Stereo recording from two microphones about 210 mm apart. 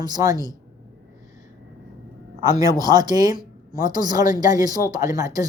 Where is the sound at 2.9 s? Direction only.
20° right (ahead or behind).